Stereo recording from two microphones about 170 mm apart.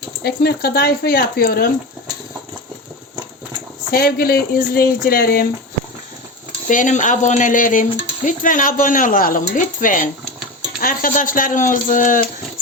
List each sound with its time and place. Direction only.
0.2 s speech: 70° left (ahead or behind)
3.9 s speech: 60° left (ahead or behind)
6.7 s speech: 50° left (ahead or behind)